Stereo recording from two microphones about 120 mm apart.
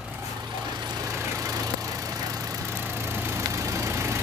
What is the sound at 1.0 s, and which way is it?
Vehicle, 25° right (ahead or behind).